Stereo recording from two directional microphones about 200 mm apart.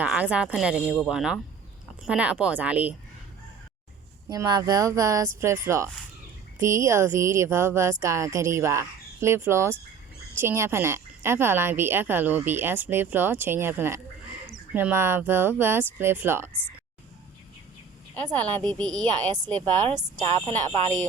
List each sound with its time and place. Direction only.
0.0 s speech: 5° right (ahead or behind)
4.3 s speech: 20° right (ahead or behind)
18.1 s speech: 10° left (ahead or behind)
19.9 s speech: 20° right (ahead or behind)